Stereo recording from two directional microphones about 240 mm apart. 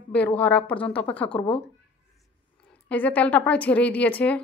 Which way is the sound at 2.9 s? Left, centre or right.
Centre.